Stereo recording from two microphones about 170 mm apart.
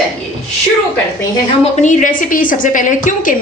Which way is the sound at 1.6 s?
45° left (ahead or behind).